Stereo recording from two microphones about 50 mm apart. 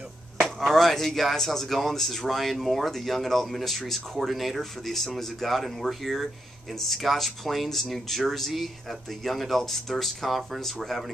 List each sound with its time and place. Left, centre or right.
0.4 s speech: centre